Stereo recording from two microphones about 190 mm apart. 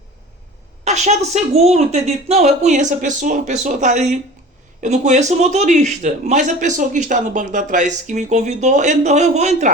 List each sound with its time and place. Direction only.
0.9 s a man's voice: 35° right (ahead or behind)